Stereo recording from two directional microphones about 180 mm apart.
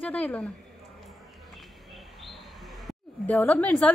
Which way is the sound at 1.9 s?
Centre (ahead or behind).